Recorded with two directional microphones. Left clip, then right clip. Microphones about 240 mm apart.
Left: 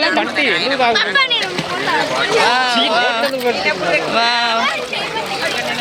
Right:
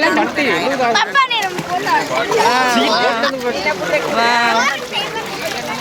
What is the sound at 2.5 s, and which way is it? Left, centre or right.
Speech, centre.